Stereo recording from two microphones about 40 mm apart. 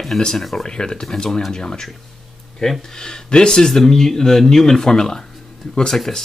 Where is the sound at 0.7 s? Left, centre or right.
Centre.